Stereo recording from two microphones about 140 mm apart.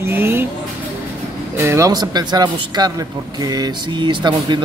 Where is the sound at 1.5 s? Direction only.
20° right (ahead or behind).